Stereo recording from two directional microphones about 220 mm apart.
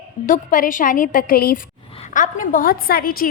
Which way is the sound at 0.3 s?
40° left (ahead or behind).